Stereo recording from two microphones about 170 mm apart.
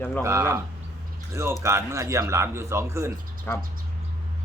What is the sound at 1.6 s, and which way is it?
Speech, 15° right (ahead or behind).